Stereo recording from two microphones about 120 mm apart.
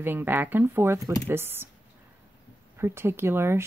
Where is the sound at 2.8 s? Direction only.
20° right (ahead or behind).